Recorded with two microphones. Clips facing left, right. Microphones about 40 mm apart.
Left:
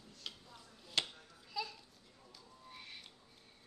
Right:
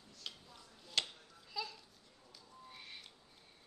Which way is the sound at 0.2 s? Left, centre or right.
Centre.